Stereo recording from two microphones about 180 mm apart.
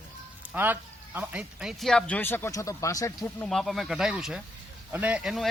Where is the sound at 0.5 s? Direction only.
10° right (ahead or behind); by 3.1 s 15° left (ahead or behind).